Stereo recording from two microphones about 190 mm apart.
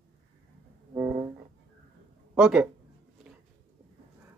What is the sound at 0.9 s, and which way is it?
Music, 20° right (ahead or behind).